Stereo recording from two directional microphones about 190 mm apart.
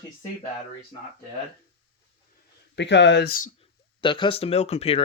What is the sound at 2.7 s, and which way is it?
Speech, 65° left (ahead or behind).